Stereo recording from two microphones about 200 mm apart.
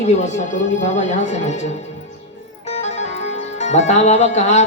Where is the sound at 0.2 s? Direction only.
35° left (ahead or behind).